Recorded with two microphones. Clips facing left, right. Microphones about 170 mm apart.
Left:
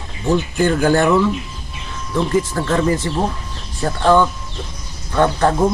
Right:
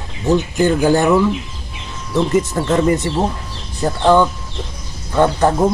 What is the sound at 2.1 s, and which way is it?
Speech, 25° right (ahead or behind).